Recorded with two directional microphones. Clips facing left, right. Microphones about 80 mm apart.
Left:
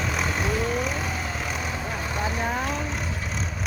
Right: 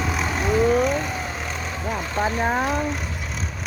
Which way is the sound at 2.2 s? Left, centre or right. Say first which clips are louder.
Right 6 dB; right.